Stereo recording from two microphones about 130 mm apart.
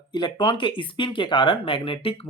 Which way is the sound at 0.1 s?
35° left (ahead or behind).